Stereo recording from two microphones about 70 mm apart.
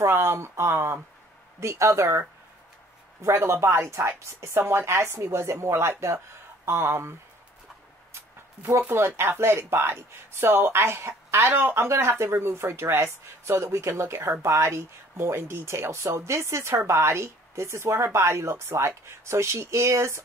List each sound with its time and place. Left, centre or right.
0.0 s speech: right
8.6 s speech: right